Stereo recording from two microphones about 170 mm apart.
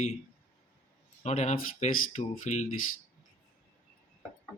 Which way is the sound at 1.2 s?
40° left (ahead or behind).